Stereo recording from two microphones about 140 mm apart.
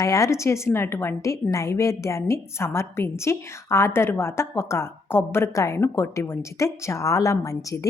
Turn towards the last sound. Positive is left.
turn(degrees=25)  # may be behind; listen again after turning